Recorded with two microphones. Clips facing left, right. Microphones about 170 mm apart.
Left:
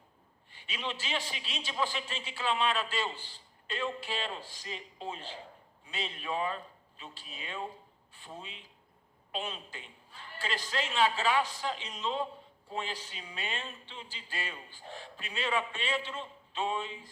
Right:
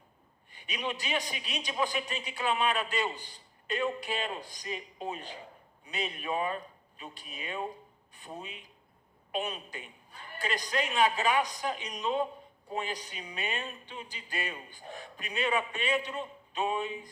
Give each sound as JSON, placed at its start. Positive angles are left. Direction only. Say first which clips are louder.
{"t": 0.7, "sound": "a man's voice", "louder": "right 3 dB", "side_deg": -15}